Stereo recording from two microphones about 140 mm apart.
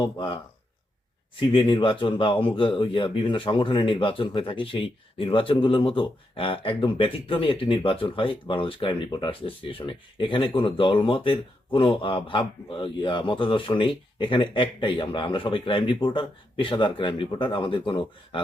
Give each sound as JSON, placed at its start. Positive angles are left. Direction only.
{"t": 1.4, "sound": "speech", "side_deg": 35}